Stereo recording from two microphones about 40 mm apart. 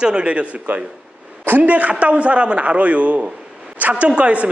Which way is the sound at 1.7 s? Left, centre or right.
Right.